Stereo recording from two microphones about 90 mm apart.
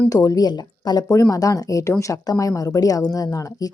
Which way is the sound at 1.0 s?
35° left (ahead or behind).